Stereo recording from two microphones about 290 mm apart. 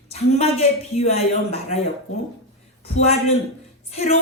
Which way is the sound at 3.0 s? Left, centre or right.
Left.